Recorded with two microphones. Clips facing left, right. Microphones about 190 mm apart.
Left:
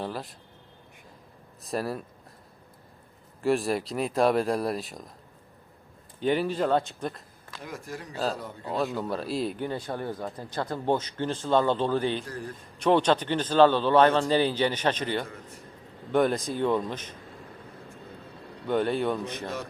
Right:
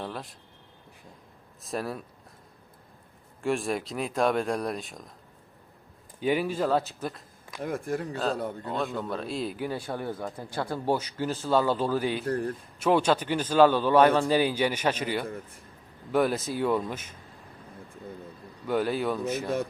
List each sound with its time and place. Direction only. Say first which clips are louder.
0.0 s speech: left 2 dB; centre (ahead or behind)
1.6 s speech: left 2 dB; centre (ahead or behind)
3.4 s speech: left 3 dB; centre (ahead or behind)
6.1 s a man's voice: left 1 dB; 10° right (ahead or behind)
7.6 s speech: right 8 dB; 55° right (ahead or behind)
8.1 s a man's voice: right 2 dB; 5° left (ahead or behind)
12.2 s speech: right 8 dB; 60° right (ahead or behind)
12.8 s a man's voice: left 1 dB; 10° right (ahead or behind)
18.7 s speech: left 1 dB; 5° right (ahead or behind)